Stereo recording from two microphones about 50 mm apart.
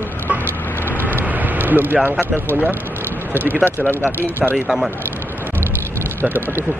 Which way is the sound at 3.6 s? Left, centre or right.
Left.